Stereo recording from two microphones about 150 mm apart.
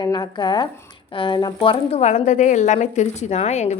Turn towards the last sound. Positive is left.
turn(degrees=50)  # may be behind; listen again after turning